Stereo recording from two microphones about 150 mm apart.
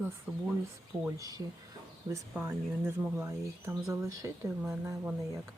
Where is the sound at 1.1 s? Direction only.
25° right (ahead or behind).